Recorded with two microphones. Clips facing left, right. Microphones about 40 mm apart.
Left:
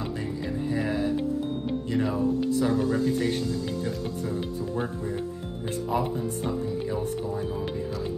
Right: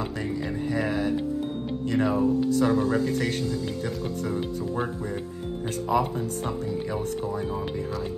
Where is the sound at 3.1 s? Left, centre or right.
Right.